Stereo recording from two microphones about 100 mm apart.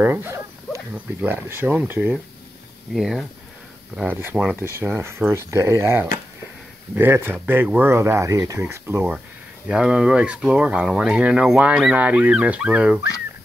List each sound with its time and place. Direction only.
0.0 s speech: 20° right (ahead or behind)
2.9 s speech: centre (ahead or behind)
4.6 s speech: 25° right (ahead or behind)
9.7 s speech: 10° right (ahead or behind)